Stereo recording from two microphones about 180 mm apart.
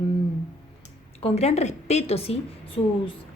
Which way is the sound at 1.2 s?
35° left (ahead or behind).